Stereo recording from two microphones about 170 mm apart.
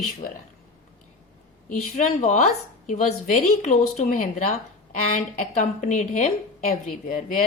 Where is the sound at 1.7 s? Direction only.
45° left (ahead or behind).